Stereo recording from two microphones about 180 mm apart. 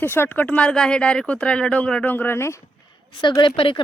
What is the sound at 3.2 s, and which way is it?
Speech, 25° left (ahead or behind).